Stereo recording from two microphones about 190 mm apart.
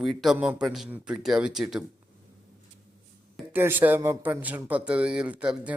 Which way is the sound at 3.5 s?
10° right (ahead or behind).